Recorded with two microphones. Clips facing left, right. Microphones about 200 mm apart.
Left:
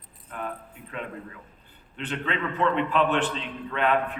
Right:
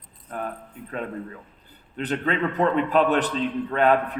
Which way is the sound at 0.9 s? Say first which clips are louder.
Right 5 dB; 40° right (ahead or behind).